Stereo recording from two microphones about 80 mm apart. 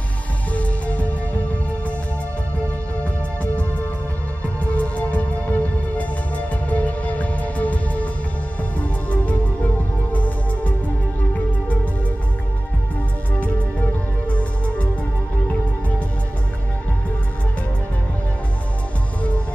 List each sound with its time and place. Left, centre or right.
0.5 s music: centre
4.6 s music: centre
9.1 s music: centre
14.2 s music: centre